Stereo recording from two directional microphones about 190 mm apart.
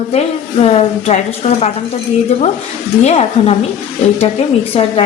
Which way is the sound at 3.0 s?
35° left (ahead or behind).